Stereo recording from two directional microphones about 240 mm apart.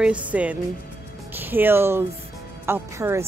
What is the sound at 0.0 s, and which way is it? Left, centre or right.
A woman's voice, centre.